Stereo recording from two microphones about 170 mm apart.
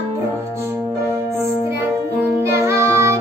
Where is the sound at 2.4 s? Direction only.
15° right (ahead or behind).